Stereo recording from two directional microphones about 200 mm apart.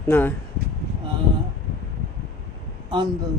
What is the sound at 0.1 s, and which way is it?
Speech, 10° left (ahead or behind).